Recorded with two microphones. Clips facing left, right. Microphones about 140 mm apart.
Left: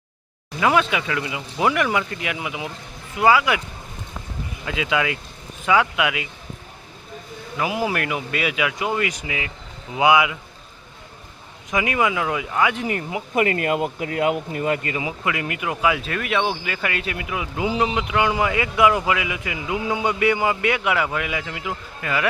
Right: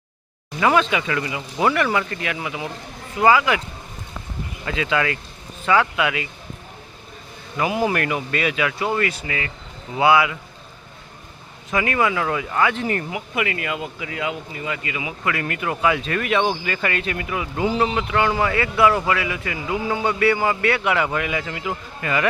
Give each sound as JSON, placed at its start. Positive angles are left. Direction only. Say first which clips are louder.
{"t": 0.6, "sound": "speech", "louder": "right 1 dB", "side_deg": 5}
{"t": 4.6, "sound": "speech", "louder": "right 1 dB", "side_deg": 10}
{"t": 7.5, "sound": "speech", "louder": "right 2 dB", "side_deg": 0}
{"t": 11.7, "sound": "speech", "louder": "right 1 dB", "side_deg": 15}
{"t": 13.3, "sound": "speech", "louder": "left 6 dB", "side_deg": 45}
{"t": 15.2, "sound": "speech", "louder": "right 1 dB", "side_deg": 15}